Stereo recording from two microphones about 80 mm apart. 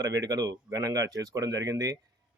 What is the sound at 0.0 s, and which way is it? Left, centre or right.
Speech, right.